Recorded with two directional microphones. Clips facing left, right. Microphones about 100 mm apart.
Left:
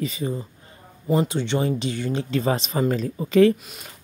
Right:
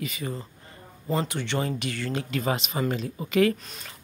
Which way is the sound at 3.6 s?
5° left (ahead or behind).